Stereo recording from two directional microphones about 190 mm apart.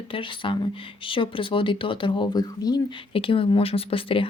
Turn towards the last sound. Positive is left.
turn(degrees=30)  # may be behind; listen again after turning